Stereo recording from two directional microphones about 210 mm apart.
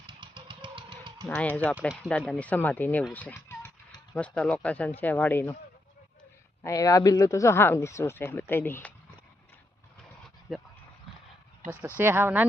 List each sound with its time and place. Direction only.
0.1 s a sound: 25° right (ahead or behind)
1.3 s speech: 5° left (ahead or behind)
6.6 s speech: 15° left (ahead or behind)
10.5 s speech: centre (ahead or behind)
11.9 s speech: 10° right (ahead or behind)